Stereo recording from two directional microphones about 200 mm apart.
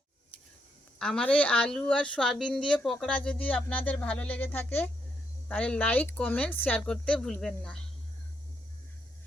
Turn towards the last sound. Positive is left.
turn(degrees=5)  # may be behind; listen again after turning